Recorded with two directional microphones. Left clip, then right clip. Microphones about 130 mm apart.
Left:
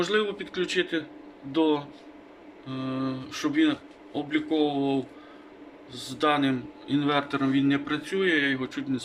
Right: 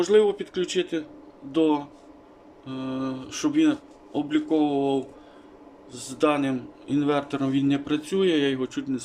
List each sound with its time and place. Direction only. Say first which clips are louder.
0.0 s a man's voice: right 6 dB; 10° right (ahead or behind)